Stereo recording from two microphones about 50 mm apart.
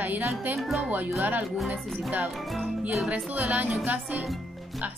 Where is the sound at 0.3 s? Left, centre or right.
Right.